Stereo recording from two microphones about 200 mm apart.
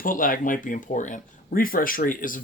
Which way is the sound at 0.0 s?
45° left (ahead or behind).